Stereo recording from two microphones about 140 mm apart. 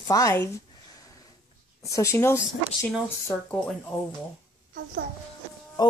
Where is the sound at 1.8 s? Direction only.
20° left (ahead or behind).